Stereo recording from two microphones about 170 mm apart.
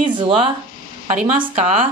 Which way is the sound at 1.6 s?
45° right (ahead or behind).